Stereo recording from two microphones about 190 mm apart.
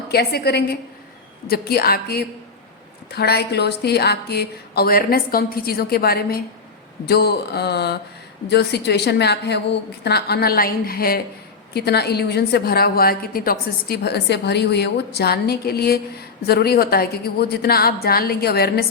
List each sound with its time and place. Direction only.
0.1 s a woman's voice: 55° left (ahead or behind)